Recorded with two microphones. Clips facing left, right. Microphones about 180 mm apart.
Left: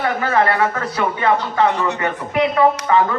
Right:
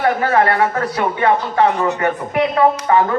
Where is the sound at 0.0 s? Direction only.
35° right (ahead or behind).